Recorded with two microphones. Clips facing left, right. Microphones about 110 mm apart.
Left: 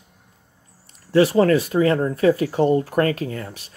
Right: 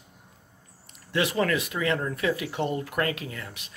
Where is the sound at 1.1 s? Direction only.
35° left (ahead or behind).